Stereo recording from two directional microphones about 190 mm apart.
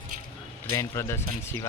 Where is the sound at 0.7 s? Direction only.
15° left (ahead or behind).